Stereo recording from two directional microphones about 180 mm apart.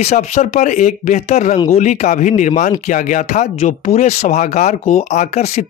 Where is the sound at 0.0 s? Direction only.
40° left (ahead or behind).